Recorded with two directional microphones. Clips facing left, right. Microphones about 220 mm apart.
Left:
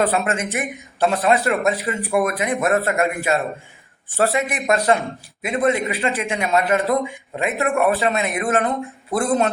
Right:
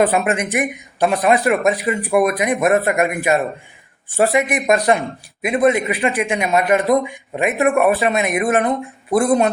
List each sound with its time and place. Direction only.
0.0 s a man's voice: 15° right (ahead or behind)